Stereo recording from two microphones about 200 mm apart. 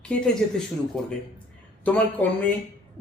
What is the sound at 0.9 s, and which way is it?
Speech, centre (ahead or behind).